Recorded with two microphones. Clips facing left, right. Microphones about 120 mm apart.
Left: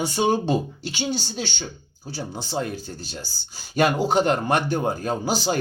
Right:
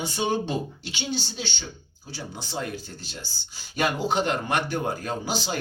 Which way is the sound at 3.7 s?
45° left (ahead or behind).